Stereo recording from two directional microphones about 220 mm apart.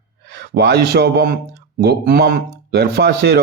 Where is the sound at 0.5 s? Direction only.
50° right (ahead or behind).